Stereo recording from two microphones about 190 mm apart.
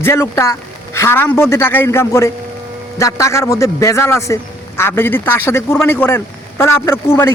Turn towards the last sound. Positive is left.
turn(degrees=15)  # may be behind; listen again after turning